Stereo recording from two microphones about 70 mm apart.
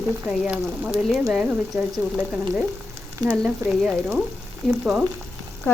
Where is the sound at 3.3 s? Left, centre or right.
Centre.